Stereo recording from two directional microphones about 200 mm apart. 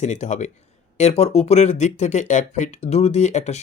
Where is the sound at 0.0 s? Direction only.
35° left (ahead or behind).